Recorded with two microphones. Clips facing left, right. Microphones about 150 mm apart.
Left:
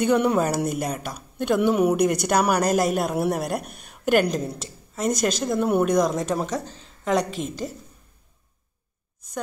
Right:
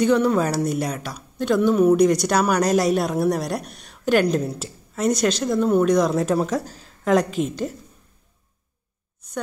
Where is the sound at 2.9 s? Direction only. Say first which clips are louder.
Right 2 dB; 10° left (ahead or behind).